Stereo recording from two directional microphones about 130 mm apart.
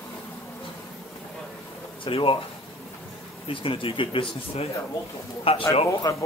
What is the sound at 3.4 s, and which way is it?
Speech, 40° left (ahead or behind).